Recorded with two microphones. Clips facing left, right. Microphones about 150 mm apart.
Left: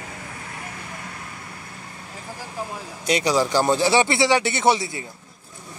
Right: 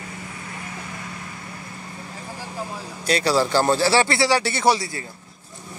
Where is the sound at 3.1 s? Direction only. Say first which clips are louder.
Even; 15° left (ahead or behind).